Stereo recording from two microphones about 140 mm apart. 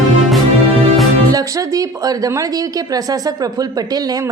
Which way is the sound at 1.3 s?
25° right (ahead or behind).